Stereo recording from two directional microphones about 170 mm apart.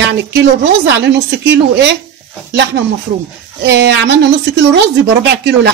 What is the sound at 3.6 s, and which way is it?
Speech, 90° right.